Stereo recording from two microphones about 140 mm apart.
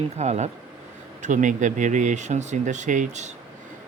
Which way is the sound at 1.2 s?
65° right (ahead or behind).